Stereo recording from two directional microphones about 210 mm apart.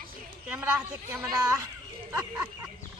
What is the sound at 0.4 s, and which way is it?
A woman's voice, 5° right (ahead or behind).